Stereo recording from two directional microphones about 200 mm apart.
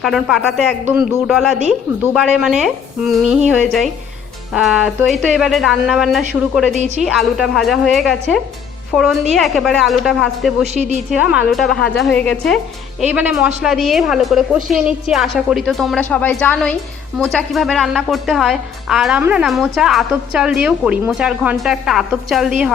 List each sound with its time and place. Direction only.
0.0 s a woman's voice: centre (ahead or behind)
10.8 s a woman's voice: 35° right (ahead or behind)
11.1 s a woman's voice: 5° right (ahead or behind)
13.0 s a woman's voice: 10° right (ahead or behind)